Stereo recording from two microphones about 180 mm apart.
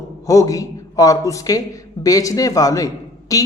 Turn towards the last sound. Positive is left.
turn(degrees=20)  # may be behind; listen again after turning